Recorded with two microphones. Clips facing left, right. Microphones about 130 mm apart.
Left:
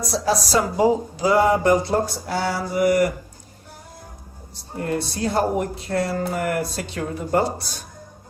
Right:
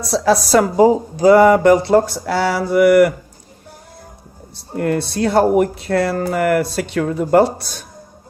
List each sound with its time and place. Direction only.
0.1 s speech: 65° right (ahead or behind)
4.8 s speech: 70° right (ahead or behind)